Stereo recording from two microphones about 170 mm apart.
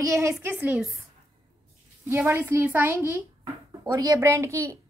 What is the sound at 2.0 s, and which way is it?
A woman's voice, 15° right (ahead or behind).